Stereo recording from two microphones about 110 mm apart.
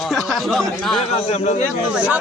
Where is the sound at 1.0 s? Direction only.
70° left (ahead or behind).